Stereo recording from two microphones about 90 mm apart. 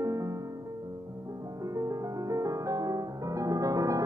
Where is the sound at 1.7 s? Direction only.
35° right (ahead or behind).